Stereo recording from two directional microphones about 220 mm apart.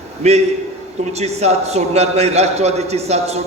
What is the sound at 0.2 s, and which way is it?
Speech, 30° right (ahead or behind).